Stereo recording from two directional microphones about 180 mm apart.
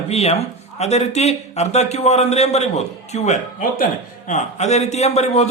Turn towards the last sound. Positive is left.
turn(degrees=35)  # may be behind; listen again after turning